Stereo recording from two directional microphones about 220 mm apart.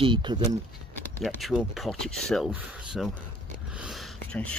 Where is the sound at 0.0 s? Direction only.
20° right (ahead or behind).